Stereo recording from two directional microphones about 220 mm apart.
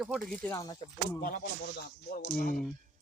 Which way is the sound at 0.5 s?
15° left (ahead or behind).